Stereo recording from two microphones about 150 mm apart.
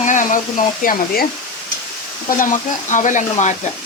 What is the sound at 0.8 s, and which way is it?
Speech, 85° left.